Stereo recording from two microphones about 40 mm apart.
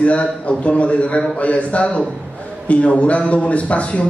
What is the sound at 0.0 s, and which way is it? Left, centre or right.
A man's voice, left.